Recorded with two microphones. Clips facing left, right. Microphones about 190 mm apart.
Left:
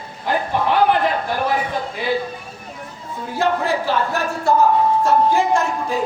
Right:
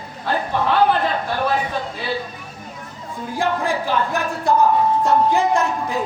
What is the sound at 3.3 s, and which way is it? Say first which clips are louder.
Speech: left 2 dB; 15° right (ahead or behind).